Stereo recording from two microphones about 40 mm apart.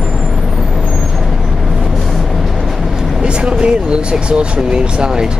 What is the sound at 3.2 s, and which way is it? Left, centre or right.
Speech, right.